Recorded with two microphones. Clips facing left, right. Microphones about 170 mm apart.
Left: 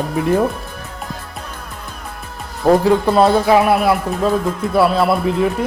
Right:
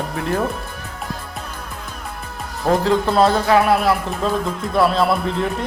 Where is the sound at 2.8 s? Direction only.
10° left (ahead or behind).